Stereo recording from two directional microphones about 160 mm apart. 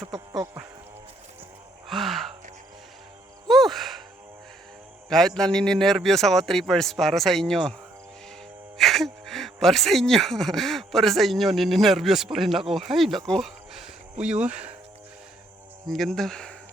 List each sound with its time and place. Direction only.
0.0 s speech: 25° right (ahead or behind)
1.9 s gasp: centre (ahead or behind)
3.5 s music: centre (ahead or behind)
5.0 s speech: 5° left (ahead or behind)
8.8 s speech: centre (ahead or behind)
15.9 s speech: centre (ahead or behind)